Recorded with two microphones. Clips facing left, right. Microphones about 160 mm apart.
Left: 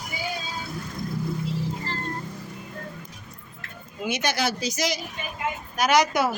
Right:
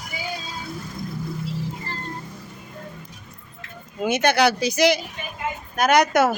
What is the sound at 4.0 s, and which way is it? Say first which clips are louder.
Speech: right 7 dB; 50° right (ahead or behind).